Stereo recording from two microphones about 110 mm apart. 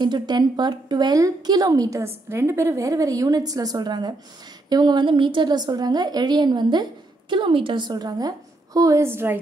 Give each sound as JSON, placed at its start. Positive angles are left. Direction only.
{"t": 0.0, "sound": "a woman's voice", "side_deg": -40}